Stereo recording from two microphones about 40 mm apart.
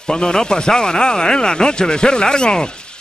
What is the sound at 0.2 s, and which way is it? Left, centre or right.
Speech, centre.